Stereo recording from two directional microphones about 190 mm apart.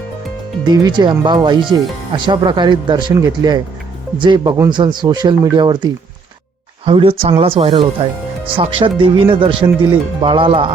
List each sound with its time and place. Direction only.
0.6 s speech: 20° right (ahead or behind)